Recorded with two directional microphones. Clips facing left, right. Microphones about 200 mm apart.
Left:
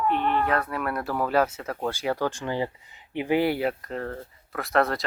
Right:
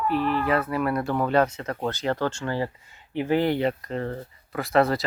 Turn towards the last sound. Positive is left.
turn(degrees=0)  # may be behind; listen again after turning